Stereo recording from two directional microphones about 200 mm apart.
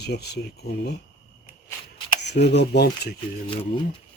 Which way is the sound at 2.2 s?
60° left (ahead or behind).